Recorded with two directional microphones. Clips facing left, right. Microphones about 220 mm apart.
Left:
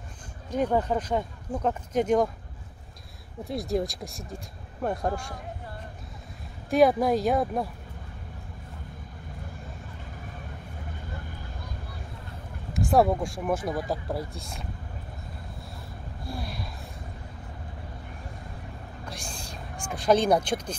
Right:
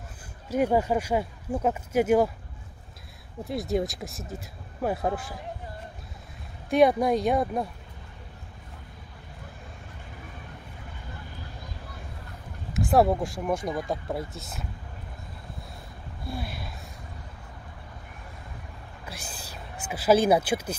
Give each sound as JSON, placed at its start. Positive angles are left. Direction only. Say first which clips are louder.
{"t": 0.5, "sound": "speech", "louder": "right 2 dB", "side_deg": -10}
{"t": 3.4, "sound": "speech", "louder": "right 1 dB", "side_deg": 0}
{"t": 6.7, "sound": "speech", "louder": "even", "side_deg": 0}
{"t": 12.7, "sound": "speech", "louder": "even", "side_deg": 0}
{"t": 16.3, "sound": "speech", "louder": "right 1 dB", "side_deg": 0}
{"t": 19.0, "sound": "a sound", "louder": "left 1 dB", "side_deg": -5}